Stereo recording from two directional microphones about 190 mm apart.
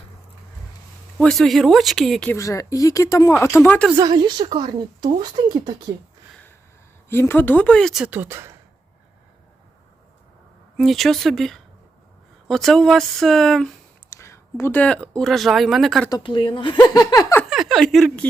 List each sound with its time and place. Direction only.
1.2 s a woman's voice: centre (ahead or behind)
2.3 s speech: 15° left (ahead or behind)
3.9 s a woman's voice: 20° right (ahead or behind)
7.1 s a woman's voice: 10° left (ahead or behind); by 8.5 s 15° right (ahead or behind)
10.8 s a woman's voice: centre (ahead or behind)
14.2 s speech: 15° left (ahead or behind); by 16.0 s centre (ahead or behind)
16.0 s speech: 20° left (ahead or behind)
17.5 s a woman's voice: centre (ahead or behind)